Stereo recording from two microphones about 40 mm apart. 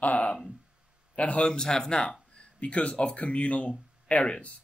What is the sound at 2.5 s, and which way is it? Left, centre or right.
Speech, left.